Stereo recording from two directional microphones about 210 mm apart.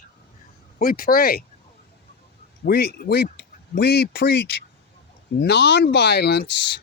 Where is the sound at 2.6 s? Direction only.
50° left (ahead or behind).